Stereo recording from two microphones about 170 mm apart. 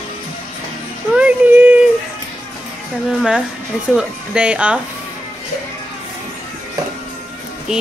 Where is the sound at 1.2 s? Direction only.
10° right (ahead or behind).